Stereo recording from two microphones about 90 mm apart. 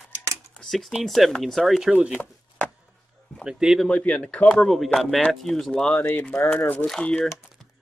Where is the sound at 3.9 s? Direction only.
10° left (ahead or behind).